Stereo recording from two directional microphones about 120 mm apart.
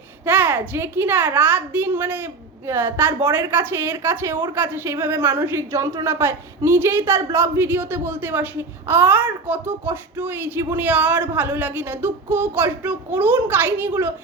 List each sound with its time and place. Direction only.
0.3 s a child's voice: 15° right (ahead or behind)